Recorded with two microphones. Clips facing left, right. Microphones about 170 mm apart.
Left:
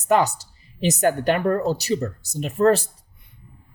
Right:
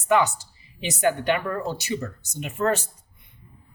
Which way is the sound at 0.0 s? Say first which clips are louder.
Left 2 dB; 40° left (ahead or behind).